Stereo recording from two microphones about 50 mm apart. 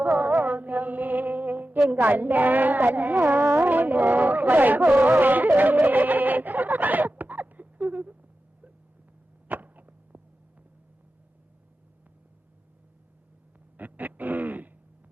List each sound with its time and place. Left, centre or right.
0.0 s music: right
1.9 s a woman's voice: right
3.4 s a sound: right
9.5 s arrow: right
13.7 s music: right